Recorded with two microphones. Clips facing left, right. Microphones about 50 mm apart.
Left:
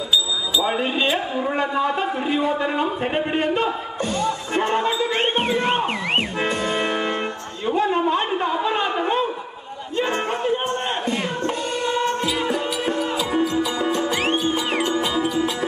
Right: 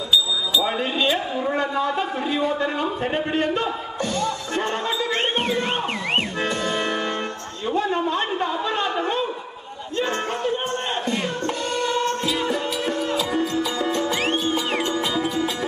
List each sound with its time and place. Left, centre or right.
0.7 s a man's voice: left
1.0 s a man's voice: centre
9.9 s music: centre